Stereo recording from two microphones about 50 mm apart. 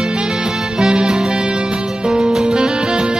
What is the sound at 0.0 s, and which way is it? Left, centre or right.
Music, centre.